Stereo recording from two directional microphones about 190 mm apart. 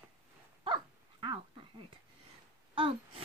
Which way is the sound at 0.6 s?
25° right (ahead or behind).